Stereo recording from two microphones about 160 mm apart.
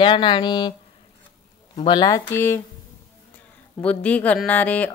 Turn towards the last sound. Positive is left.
turn(degrees=10)  # may be behind; listen again after turning